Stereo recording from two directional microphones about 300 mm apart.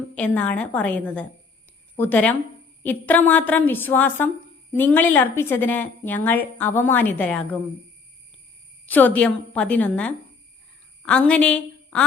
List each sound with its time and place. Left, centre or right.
0.2 s a woman's voice: centre
8.9 s a woman's voice: centre